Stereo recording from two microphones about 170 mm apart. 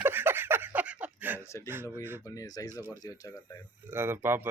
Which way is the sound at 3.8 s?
15° right (ahead or behind).